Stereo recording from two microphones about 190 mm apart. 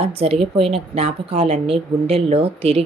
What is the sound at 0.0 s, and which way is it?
Speech, 30° right (ahead or behind).